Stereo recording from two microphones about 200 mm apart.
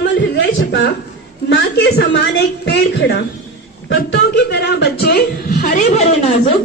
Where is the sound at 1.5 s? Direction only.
55° left (ahead or behind).